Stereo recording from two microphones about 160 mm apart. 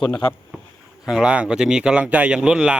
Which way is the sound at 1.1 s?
5° right (ahead or behind).